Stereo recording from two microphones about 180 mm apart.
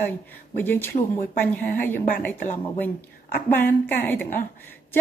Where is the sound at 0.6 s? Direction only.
10° left (ahead or behind).